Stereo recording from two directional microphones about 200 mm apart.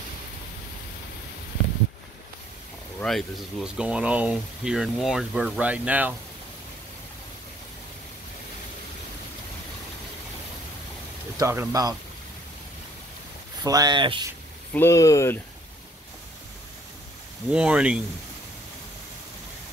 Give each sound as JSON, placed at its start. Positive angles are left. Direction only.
{"t": 3.0, "sound": "speech", "side_deg": 0}
{"t": 11.3, "sound": "speech", "side_deg": -15}
{"t": 13.7, "sound": "speech", "side_deg": -20}
{"t": 14.7, "sound": "speech", "side_deg": 10}
{"t": 17.5, "sound": "speech", "side_deg": -5}